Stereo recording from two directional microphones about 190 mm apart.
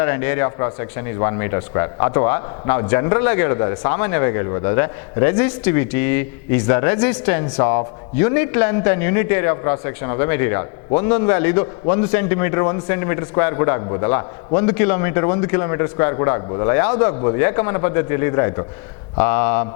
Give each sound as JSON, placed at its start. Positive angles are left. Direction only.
{"t": 0.0, "sound": "a man's voice", "side_deg": 15}